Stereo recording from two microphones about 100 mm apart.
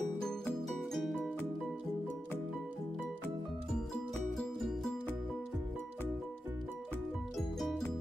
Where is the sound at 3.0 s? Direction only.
5° left (ahead or behind).